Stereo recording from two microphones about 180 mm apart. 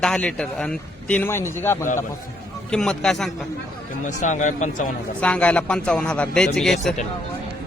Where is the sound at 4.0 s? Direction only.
45° left (ahead or behind).